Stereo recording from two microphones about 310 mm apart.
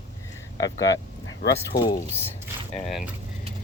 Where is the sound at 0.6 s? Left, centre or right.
Left.